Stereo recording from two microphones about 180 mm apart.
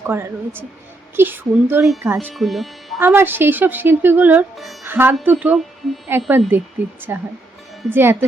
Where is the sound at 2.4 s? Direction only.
Centre (ahead or behind).